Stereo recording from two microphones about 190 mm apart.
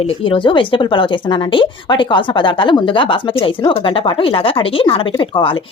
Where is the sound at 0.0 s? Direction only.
30° left (ahead or behind).